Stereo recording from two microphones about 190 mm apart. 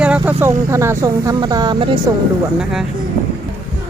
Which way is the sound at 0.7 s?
15° right (ahead or behind).